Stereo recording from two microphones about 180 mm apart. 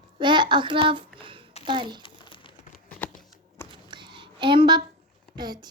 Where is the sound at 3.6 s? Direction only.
25° right (ahead or behind).